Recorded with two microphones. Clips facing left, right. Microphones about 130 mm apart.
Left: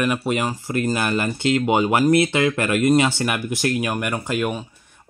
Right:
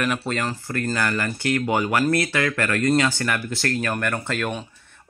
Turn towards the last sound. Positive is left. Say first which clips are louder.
# left 3 dB
turn(degrees=10)  # may be behind; listen again after turning